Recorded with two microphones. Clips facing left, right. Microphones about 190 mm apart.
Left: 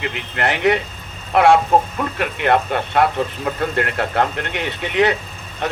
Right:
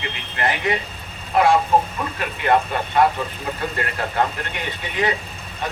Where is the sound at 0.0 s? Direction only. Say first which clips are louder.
Left 3 dB; 70° left (ahead or behind).